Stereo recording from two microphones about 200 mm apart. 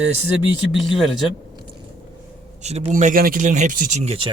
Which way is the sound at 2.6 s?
35° right (ahead or behind).